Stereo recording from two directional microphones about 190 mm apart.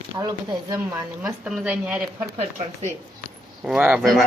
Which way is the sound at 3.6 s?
5° right (ahead or behind).